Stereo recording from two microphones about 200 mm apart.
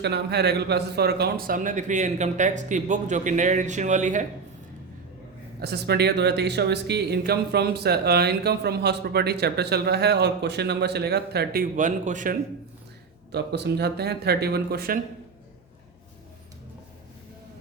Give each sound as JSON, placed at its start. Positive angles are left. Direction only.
{"t": 0.0, "sound": "speech", "side_deg": -55}
{"t": 5.5, "sound": "speech", "side_deg": -55}
{"t": 13.3, "sound": "speech", "side_deg": -55}